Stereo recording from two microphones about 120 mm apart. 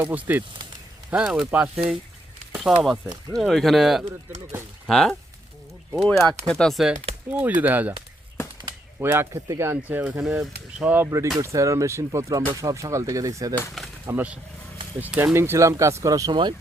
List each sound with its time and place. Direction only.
0.0 s speech: 15° right (ahead or behind)
7.3 s speech: 15° right (ahead or behind)
9.0 s speech: 20° right (ahead or behind)
14.1 s speech: 15° right (ahead or behind); by 16.6 s 40° right (ahead or behind)